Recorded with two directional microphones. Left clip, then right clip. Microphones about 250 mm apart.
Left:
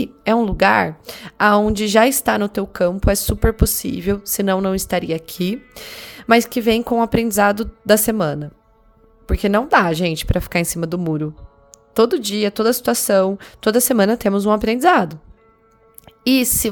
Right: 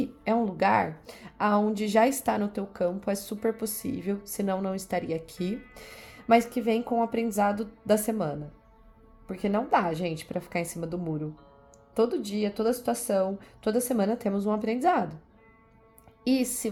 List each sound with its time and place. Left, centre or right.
0.0 s a woman's voice: left